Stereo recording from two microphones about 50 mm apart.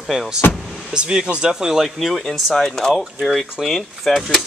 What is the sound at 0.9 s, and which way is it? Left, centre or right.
Speech, centre.